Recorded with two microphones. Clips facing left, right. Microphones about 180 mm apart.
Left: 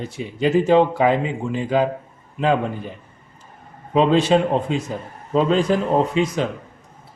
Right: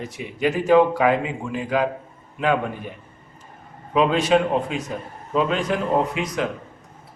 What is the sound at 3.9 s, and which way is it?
A man's voice, 30° left (ahead or behind).